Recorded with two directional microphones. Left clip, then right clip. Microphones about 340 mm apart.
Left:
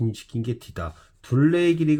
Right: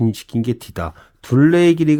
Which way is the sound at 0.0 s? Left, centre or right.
Right.